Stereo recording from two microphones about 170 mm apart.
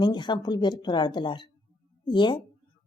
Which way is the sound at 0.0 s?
25° left (ahead or behind).